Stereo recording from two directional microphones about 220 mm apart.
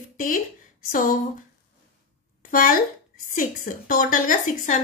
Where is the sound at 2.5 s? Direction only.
40° left (ahead or behind).